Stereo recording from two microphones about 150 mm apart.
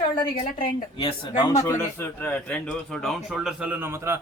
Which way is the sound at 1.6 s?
15° left (ahead or behind).